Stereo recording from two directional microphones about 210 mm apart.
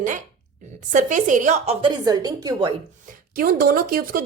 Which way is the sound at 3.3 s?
45° right (ahead or behind).